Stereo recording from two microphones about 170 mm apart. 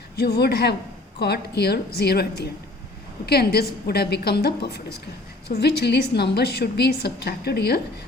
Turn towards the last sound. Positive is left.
turn(degrees=70)  # may be behind; listen again after turning